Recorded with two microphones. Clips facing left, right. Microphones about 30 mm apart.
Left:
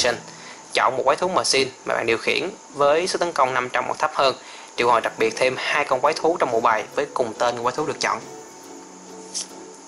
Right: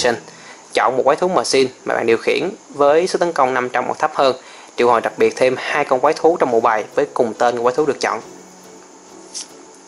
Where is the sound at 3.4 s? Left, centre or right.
Centre.